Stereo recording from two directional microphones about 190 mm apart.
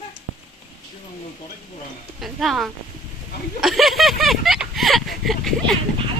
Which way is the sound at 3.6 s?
Centre (ahead or behind).